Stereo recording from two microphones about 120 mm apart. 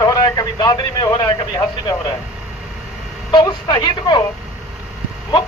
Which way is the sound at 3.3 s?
35° left (ahead or behind).